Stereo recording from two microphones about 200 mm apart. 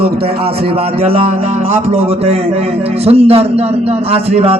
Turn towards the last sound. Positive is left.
turn(degrees=-30)  # may be behind; listen again after turning